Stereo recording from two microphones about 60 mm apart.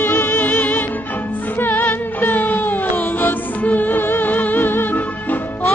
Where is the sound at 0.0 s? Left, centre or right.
Left.